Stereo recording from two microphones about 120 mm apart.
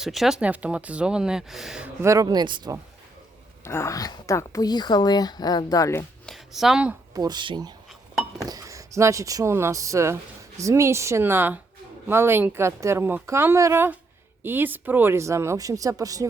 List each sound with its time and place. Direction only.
0.0 s speech: centre (ahead or behind)
2.0 s speech: 25° right (ahead or behind)
3.6 s a woman's voice: 20° left (ahead or behind)
6.2 s a sound: centre (ahead or behind)
7.1 s speech: 35° right (ahead or behind)
8.4 s speech: 30° right (ahead or behind)